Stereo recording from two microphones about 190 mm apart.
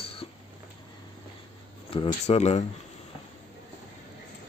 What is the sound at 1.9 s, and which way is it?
Speech, 30° left (ahead or behind).